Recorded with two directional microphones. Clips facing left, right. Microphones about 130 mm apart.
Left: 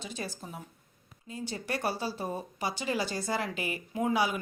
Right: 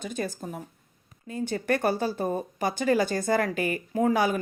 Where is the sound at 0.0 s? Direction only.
50° right (ahead or behind).